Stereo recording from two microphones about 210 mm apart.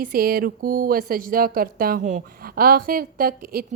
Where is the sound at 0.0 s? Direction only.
45° right (ahead or behind).